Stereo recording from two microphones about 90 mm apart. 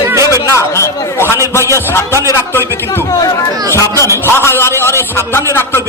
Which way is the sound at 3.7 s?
35° left (ahead or behind).